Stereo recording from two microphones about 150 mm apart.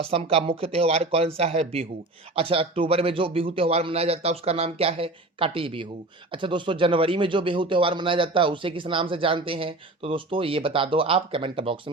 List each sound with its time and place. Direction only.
0.0 s speech: 40° right (ahead or behind)